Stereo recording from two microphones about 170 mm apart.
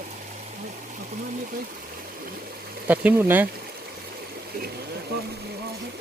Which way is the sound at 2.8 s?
10° right (ahead or behind).